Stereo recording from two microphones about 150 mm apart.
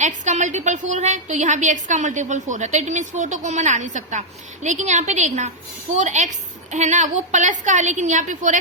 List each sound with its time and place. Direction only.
0.0 s a woman's voice: 55° right (ahead or behind)